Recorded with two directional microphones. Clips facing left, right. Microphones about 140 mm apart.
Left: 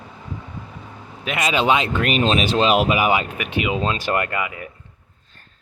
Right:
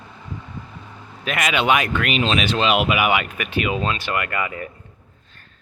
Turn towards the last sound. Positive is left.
turn(degrees=10)  # may be behind; listen again after turning